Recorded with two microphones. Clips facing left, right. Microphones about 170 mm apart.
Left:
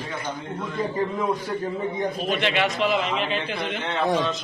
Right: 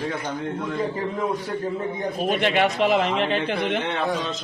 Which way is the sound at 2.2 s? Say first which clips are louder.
Right 5 dB; 45° right (ahead or behind).